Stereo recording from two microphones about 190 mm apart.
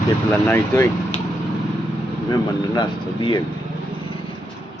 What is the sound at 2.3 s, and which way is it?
Speech, 20° left (ahead or behind).